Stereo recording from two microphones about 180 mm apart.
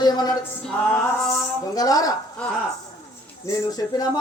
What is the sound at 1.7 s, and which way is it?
Speech, 20° left (ahead or behind).